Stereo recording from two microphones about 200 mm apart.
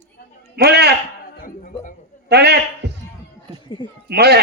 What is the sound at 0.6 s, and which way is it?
Speech, 55° right (ahead or behind).